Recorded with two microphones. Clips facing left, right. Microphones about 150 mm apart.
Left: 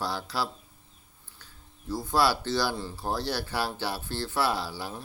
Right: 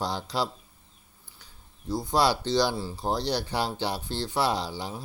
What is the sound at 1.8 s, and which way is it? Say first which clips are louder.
Speech: right 1 dB; 15° right (ahead or behind).